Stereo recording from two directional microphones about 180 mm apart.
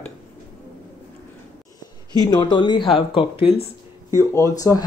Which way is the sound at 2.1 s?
25° left (ahead or behind).